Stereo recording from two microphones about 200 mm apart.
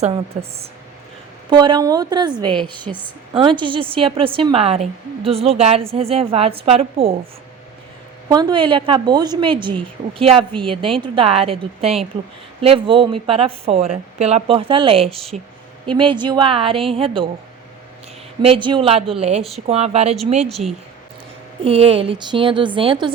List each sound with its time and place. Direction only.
1.5 s a woman's voice: 25° right (ahead or behind)
8.3 s a woman's voice: 20° right (ahead or behind)
18.4 s a woman's voice: 25° right (ahead or behind)
20.5 s speech: centre (ahead or behind)
21.6 s a woman's voice: 30° right (ahead or behind)